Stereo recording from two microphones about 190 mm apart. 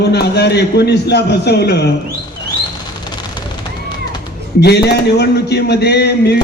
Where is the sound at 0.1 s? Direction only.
60° left (ahead or behind).